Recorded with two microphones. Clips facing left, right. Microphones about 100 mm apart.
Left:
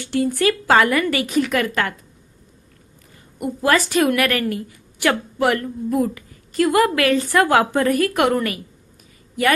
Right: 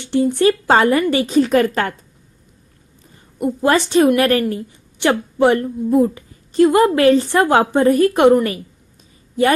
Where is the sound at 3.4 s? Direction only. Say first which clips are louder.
Right 3 dB; 25° right (ahead or behind).